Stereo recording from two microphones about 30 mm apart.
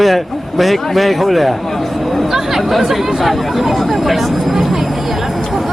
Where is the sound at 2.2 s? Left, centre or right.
Centre.